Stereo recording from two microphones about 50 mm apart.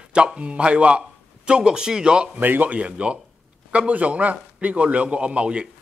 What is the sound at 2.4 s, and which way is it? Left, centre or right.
A man's voice, right.